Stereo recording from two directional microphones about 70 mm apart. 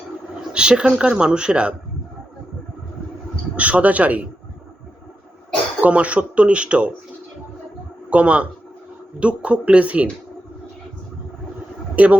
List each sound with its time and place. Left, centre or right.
0.5 s speech: centre
3.5 s speech: centre
5.8 s speech: centre
8.1 s speech: centre
12.0 s speech: centre